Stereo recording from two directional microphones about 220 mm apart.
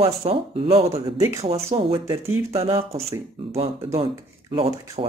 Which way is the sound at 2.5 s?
25° right (ahead or behind).